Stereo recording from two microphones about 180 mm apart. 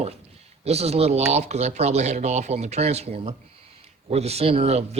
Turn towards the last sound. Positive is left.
turn(degrees=-35)  # may be behind; listen again after turning